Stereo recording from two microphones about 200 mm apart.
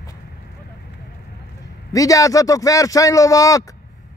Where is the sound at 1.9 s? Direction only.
15° left (ahead or behind).